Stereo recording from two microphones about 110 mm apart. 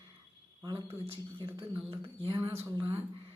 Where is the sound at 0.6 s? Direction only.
25° right (ahead or behind).